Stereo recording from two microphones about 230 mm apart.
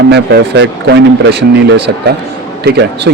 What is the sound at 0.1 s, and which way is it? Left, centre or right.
A man's voice, right.